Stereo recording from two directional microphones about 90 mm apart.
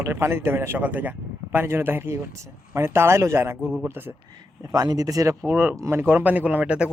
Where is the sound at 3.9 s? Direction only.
25° right (ahead or behind).